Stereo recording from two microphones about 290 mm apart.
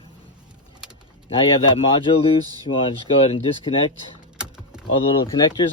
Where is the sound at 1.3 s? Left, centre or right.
Centre.